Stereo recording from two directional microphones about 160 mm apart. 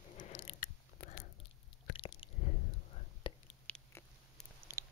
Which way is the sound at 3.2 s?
30° left (ahead or behind).